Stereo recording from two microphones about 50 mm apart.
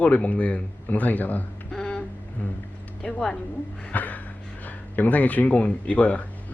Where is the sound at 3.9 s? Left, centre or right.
Left.